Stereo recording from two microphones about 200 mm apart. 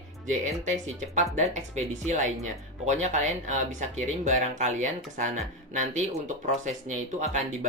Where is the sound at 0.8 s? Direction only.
35° right (ahead or behind).